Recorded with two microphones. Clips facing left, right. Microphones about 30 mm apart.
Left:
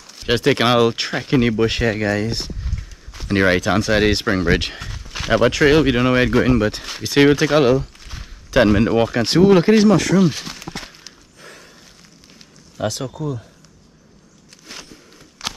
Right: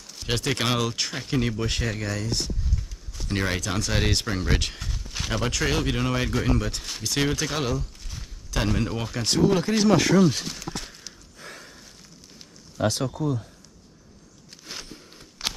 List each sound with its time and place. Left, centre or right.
0.0 s speech: centre; by 9.8 s left
9.8 s speech: centre
10.1 s walk: left
12.7 s speech: left
14.7 s a sound: centre
15.4 s walk: centre